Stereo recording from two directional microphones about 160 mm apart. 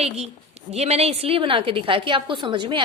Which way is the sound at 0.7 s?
40° right (ahead or behind).